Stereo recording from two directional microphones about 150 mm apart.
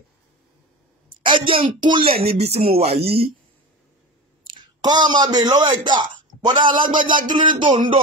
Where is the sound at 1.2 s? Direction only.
35° right (ahead or behind).